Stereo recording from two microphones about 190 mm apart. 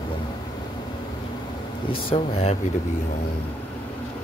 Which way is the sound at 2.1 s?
35° left (ahead or behind).